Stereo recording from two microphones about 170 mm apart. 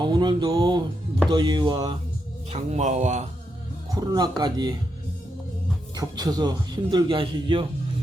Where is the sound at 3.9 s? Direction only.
20° right (ahead or behind).